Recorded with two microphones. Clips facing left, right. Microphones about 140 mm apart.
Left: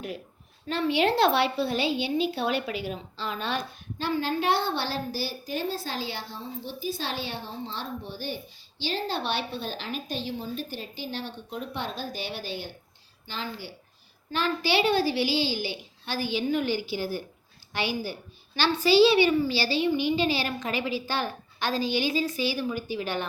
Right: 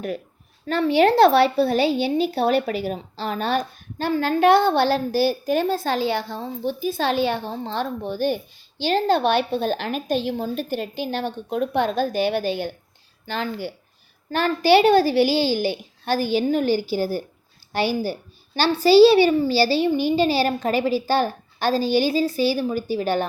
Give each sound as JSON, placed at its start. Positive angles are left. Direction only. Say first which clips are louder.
{"t": 0.7, "sound": "a woman's voice", "louder": "right 7 dB", "side_deg": -45}
{"t": 10.2, "sound": "a woman's voice", "louder": "right 8 dB", "side_deg": -65}